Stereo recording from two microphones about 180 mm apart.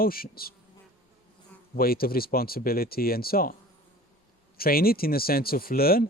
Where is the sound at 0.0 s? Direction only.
55° left (ahead or behind).